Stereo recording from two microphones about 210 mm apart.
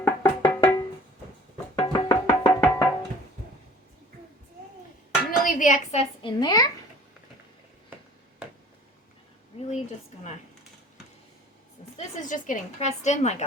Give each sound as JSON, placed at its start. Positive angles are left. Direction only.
{"t": 0.0, "sound": "music", "side_deg": 15}
{"t": 1.7, "sound": "music", "side_deg": 20}
{"t": 5.5, "sound": "a woman's voice", "side_deg": 40}
{"t": 9.6, "sound": "a sound", "side_deg": 30}
{"t": 11.9, "sound": "a woman's voice", "side_deg": 35}